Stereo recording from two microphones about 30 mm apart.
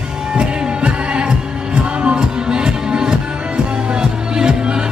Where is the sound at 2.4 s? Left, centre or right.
Right.